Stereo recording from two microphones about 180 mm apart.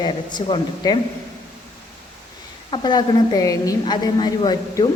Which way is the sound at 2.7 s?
25° left (ahead or behind).